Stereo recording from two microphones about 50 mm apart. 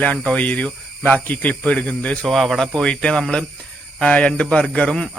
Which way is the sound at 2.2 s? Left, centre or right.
Centre.